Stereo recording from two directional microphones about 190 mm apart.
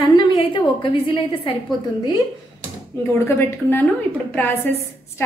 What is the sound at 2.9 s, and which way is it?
A woman's voice, 15° left (ahead or behind).